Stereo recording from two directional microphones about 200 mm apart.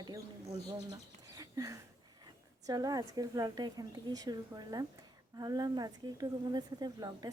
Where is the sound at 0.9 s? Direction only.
15° right (ahead or behind).